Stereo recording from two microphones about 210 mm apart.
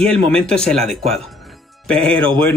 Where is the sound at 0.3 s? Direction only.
5° left (ahead or behind).